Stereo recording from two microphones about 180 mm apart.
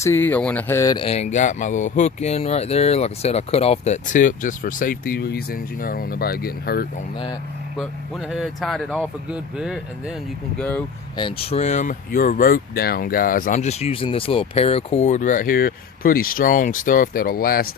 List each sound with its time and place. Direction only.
0.0 s speech: 10° left (ahead or behind)
0.9 s speech: 35° left (ahead or behind); by 6.8 s 55° left (ahead or behind)
8.3 s speech: centre (ahead or behind)
11.2 s speech: 30° left (ahead or behind); by 17.7 s 55° left (ahead or behind)